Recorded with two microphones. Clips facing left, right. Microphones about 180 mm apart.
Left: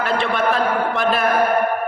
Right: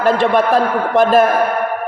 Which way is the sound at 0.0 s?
45° right (ahead or behind).